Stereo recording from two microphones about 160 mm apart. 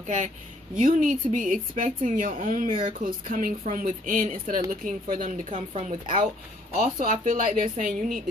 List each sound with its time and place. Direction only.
0.8 s a woman's voice: 55° right (ahead or behind)
5.5 s speech: 40° right (ahead or behind)
6.7 s speech: 60° right (ahead or behind)